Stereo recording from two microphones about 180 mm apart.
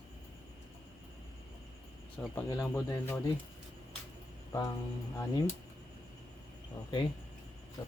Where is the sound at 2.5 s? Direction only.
20° left (ahead or behind).